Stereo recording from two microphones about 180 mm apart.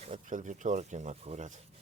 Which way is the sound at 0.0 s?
45° right (ahead or behind).